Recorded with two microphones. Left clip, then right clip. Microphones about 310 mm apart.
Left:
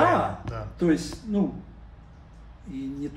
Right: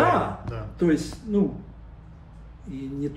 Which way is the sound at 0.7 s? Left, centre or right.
Centre.